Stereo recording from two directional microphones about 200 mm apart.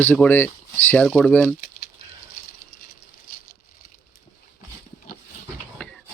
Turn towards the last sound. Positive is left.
turn(degrees=5)  # may be behind; listen again after turning